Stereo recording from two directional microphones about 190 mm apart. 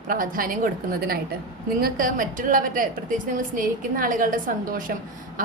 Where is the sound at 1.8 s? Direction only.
50° right (ahead or behind).